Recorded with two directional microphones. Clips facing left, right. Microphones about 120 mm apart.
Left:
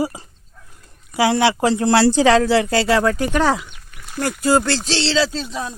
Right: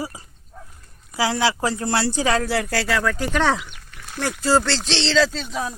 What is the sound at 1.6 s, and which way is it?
Speech, 80° left.